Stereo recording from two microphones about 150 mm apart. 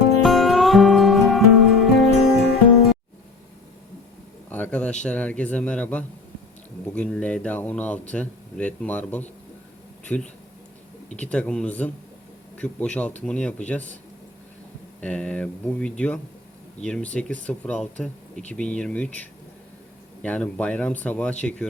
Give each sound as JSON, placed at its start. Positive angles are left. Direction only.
{"t": 0.2, "sound": "music", "side_deg": 0}
{"t": 4.4, "sound": "a sound", "side_deg": 10}
{"t": 5.0, "sound": "speech", "side_deg": 10}
{"t": 15.0, "sound": "speech", "side_deg": 10}
{"t": 20.2, "sound": "speech", "side_deg": 10}